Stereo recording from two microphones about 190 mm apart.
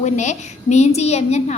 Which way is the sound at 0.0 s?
35° left (ahead or behind).